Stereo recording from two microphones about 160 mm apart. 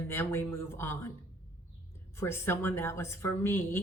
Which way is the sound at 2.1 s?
15° left (ahead or behind).